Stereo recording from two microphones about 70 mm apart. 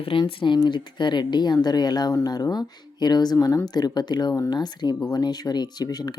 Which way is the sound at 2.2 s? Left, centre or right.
Left.